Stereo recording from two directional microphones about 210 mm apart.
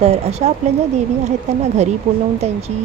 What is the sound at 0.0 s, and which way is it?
Speech, 30° right (ahead or behind).